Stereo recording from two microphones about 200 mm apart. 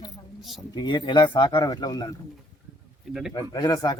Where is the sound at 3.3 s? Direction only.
20° left (ahead or behind).